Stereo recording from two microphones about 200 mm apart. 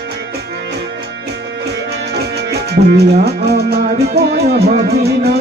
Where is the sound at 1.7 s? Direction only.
55° right (ahead or behind).